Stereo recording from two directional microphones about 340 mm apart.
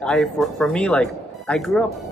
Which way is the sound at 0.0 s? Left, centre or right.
Centre.